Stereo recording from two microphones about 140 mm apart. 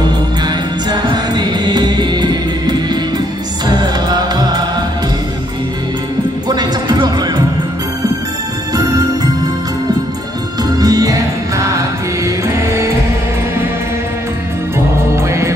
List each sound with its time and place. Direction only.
0.0 s music: 30° right (ahead or behind)
6.5 s music: 30° right (ahead or behind)
8.7 s music: 25° right (ahead or behind)
10.6 s music: 25° right (ahead or behind)
15.2 s music: 20° right (ahead or behind)